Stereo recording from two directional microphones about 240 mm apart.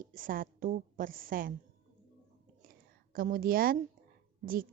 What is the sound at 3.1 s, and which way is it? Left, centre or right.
Speech, right.